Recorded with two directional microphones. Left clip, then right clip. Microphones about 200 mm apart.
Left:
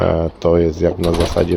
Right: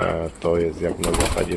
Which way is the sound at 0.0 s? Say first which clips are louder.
Left 7 dB; 60° left (ahead or behind).